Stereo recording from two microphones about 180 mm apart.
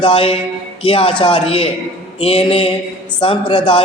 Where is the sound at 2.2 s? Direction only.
30° left (ahead or behind).